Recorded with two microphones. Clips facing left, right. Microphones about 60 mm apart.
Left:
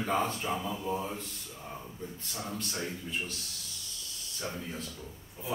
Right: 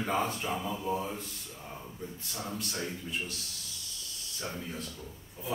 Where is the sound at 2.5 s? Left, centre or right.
Centre.